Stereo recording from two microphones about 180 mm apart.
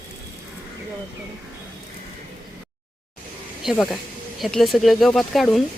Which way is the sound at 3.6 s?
Centre (ahead or behind).